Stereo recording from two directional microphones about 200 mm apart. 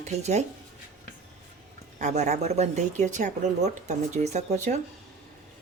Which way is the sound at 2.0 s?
35° right (ahead or behind).